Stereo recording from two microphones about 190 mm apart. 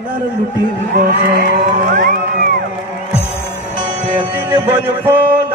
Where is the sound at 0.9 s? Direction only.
50° right (ahead or behind).